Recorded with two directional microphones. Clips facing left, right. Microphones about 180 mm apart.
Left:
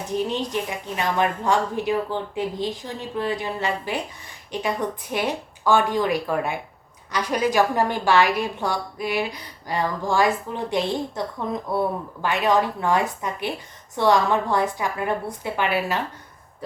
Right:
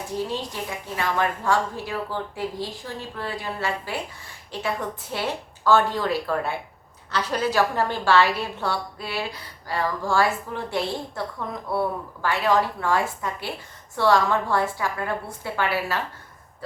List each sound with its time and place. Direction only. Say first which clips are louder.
0.1 s a woman's voice: left 5 dB; 20° left (ahead or behind)